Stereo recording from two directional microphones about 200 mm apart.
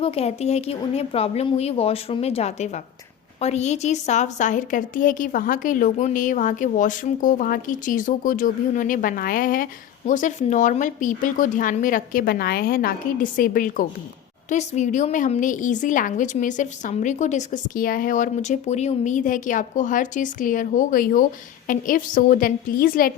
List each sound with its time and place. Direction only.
0.0 s a woman's voice: 30° left (ahead or behind); by 23.1 s 45° left (ahead or behind)